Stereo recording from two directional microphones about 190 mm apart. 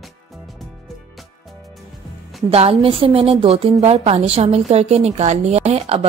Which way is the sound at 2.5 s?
30° right (ahead or behind).